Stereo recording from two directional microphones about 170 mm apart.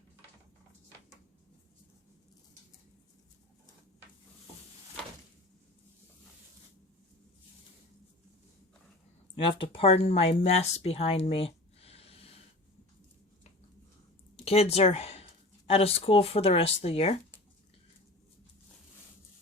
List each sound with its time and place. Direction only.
9.3 s speech: 30° left (ahead or behind)
14.4 s speech: 35° left (ahead or behind)